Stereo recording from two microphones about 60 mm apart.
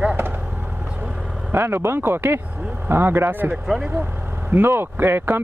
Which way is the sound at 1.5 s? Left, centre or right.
Right.